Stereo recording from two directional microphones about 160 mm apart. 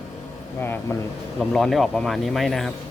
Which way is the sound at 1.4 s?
Centre (ahead or behind).